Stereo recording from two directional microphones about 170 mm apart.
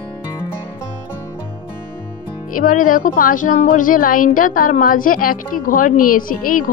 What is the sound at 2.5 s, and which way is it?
A woman's voice, 50° left (ahead or behind).